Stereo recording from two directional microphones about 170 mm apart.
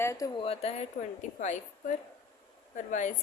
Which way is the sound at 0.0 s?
15° left (ahead or behind).